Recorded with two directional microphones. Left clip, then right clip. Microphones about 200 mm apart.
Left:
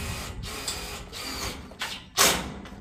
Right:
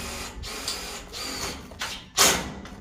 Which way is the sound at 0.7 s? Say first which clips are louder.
Right 2 dB; 5° left (ahead or behind).